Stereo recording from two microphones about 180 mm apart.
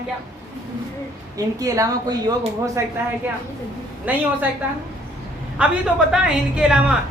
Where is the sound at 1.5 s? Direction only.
20° right (ahead or behind).